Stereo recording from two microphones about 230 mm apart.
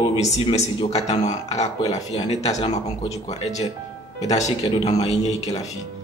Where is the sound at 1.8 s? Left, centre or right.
Centre.